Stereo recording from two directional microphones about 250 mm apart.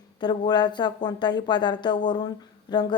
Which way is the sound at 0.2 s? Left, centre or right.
Centre.